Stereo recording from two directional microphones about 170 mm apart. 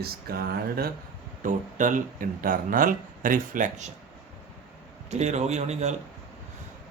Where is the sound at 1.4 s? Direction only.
50° right (ahead or behind).